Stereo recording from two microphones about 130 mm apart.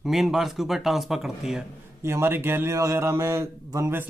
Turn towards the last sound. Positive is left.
turn(degrees=-20)  # may be behind; listen again after turning